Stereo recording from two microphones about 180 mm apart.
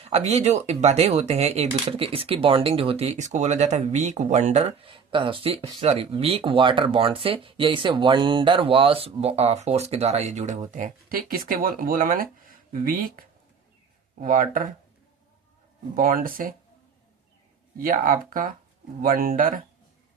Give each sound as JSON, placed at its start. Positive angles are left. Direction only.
{"t": 0.0, "sound": "speech", "side_deg": -35}
{"t": 16.0, "sound": "speech", "side_deg": -50}
{"t": 17.7, "sound": "speech", "side_deg": -50}